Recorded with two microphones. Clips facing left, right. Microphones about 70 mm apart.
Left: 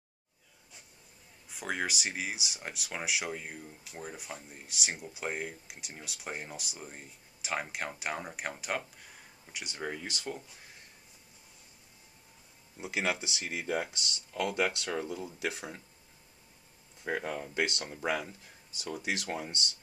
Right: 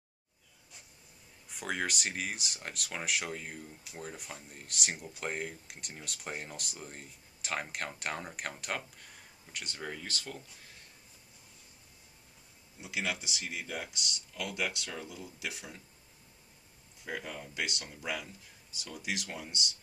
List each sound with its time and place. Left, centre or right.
1.5 s speech: centre
12.8 s speech: left
14.9 s speech: left
17.0 s speech: left